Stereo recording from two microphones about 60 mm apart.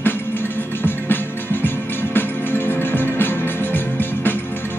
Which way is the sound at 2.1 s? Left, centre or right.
Left.